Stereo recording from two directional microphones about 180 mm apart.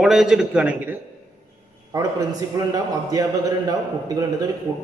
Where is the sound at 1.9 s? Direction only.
20° right (ahead or behind).